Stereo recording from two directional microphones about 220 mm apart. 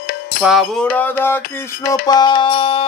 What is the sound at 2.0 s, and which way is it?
Music, 20° left (ahead or behind).